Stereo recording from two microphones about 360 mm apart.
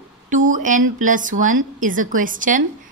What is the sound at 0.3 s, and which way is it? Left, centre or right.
A woman's voice, right.